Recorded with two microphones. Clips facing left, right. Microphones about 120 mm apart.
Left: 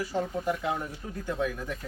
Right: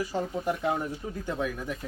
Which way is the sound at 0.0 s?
10° right (ahead or behind).